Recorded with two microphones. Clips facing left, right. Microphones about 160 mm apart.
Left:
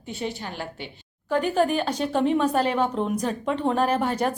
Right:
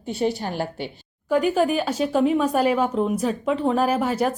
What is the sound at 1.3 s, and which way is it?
A woman's voice, 10° right (ahead or behind).